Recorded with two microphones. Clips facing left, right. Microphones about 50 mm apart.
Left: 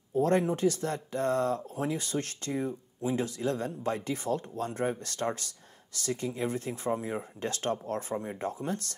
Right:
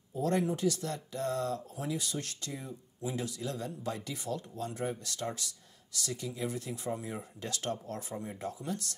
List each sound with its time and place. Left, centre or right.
0.1 s speech: left